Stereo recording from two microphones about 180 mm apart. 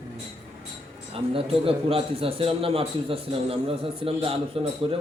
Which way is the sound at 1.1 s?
30° right (ahead or behind).